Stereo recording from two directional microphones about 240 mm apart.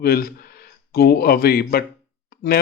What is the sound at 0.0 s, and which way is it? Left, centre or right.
Speech, left.